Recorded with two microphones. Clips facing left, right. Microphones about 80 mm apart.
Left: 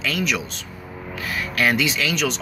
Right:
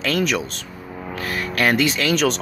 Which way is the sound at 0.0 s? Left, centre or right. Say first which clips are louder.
Right 3 dB; right.